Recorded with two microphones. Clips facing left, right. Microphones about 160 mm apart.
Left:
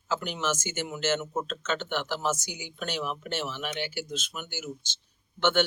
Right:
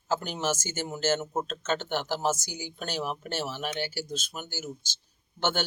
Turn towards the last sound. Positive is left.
turn(degrees=-40)  # may be behind; listen again after turning